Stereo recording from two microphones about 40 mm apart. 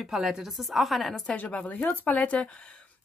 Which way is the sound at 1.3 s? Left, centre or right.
Left.